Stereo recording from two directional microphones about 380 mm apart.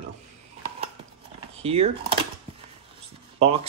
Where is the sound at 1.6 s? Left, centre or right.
Centre.